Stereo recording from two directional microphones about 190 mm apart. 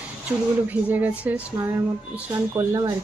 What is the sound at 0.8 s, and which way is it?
Speech, 10° right (ahead or behind).